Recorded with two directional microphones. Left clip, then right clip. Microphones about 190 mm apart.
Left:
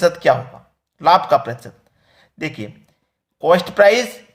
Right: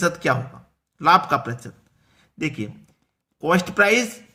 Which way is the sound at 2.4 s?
25° right (ahead or behind).